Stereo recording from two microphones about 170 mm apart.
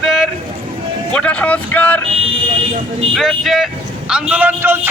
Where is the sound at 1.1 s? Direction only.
5° left (ahead or behind).